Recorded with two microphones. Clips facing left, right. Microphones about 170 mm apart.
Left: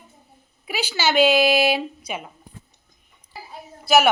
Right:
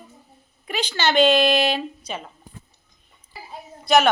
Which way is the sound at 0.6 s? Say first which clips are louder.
Even; 5° left (ahead or behind).